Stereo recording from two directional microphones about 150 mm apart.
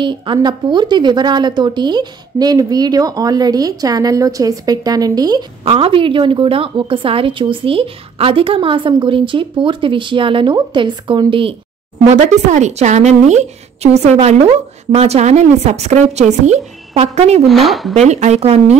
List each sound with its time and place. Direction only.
0.0 s a woman's voice: 30° right (ahead or behind)
5.7 s a woman's voice: 40° right (ahead or behind)
12.1 s a woman's voice: 50° right (ahead or behind)
17.5 s speech: centre (ahead or behind)
17.9 s a woman's voice: 50° right (ahead or behind)